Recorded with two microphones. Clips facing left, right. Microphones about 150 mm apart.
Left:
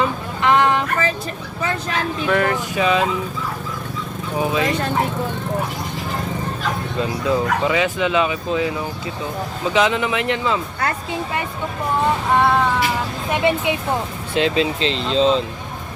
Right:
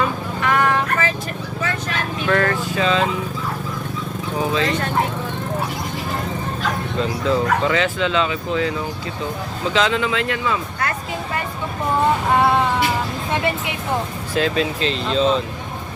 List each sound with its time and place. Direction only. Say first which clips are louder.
0.0 s a sound: left 2 dB; 20° left (ahead or behind)
2.2 s speech: right 1 dB; 15° left (ahead or behind)
4.4 s speech: left 1 dB; 15° left (ahead or behind)
7.3 s speech: even; 15° left (ahead or behind)
9.7 s speech: left 1 dB; 15° left (ahead or behind)
14.3 s speech: left 2 dB; 25° left (ahead or behind)